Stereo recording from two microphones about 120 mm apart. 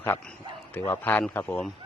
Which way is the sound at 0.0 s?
15° left (ahead or behind).